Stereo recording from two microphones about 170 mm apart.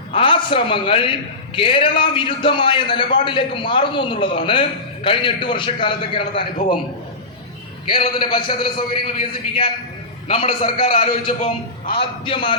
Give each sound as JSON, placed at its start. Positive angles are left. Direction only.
{"t": 0.2, "sound": "a man's voice", "side_deg": 30}
{"t": 7.9, "sound": "a man's voice", "side_deg": 30}
{"t": 10.2, "sound": "a man's voice", "side_deg": 35}